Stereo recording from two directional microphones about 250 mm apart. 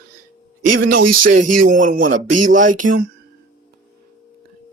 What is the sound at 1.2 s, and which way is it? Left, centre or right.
Speech, right.